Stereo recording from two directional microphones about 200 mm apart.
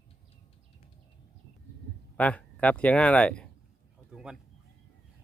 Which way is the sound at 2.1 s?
5° left (ahead or behind).